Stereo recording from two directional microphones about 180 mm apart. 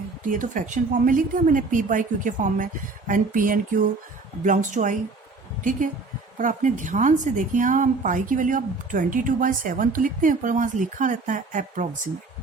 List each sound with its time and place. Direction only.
0.3 s a woman's voice: 45° right (ahead or behind)
6.4 s a woman's voice: 45° right (ahead or behind)